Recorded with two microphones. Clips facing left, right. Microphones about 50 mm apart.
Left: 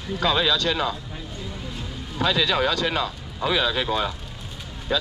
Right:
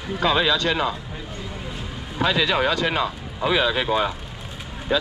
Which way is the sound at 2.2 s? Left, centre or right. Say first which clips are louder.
Right 1 dB; centre.